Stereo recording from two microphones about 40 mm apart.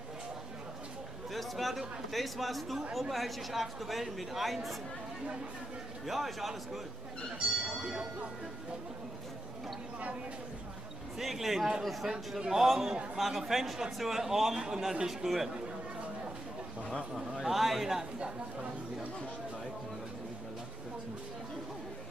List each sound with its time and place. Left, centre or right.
1.3 s a sound: centre
2.0 s a man's voice: centre
6.0 s a man's voice: centre
7.3 s a sound: right
11.1 s a man's voice: centre
17.4 s a man's voice: centre